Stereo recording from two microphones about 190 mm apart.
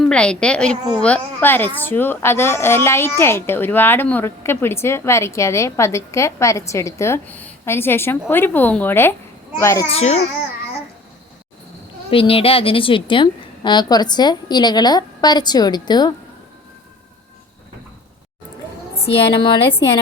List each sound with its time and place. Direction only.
0.0 s a woman's voice: 5° left (ahead or behind)
9.9 s a child's voice: 35° left (ahead or behind)
12.1 s a woman's voice: 30° left (ahead or behind)
19.0 s a woman's voice: 30° left (ahead or behind)